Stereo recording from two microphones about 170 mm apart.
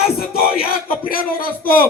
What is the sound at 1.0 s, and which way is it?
Speech, 60° left (ahead or behind).